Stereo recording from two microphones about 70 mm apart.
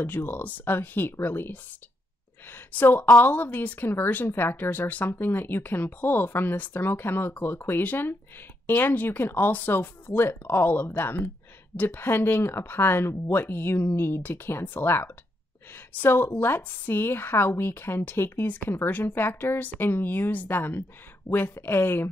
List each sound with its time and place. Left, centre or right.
0.0 s a woman's voice: left